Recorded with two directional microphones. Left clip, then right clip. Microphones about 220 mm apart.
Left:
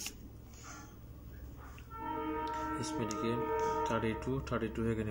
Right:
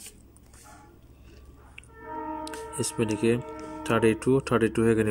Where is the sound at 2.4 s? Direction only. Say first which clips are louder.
Right 3 dB; 50° right (ahead or behind).